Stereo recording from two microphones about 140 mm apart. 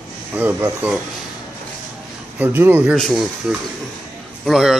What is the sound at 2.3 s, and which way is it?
Speech, 15° right (ahead or behind).